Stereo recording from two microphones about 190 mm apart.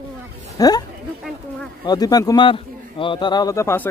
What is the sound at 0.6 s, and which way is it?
Speech, 20° left (ahead or behind).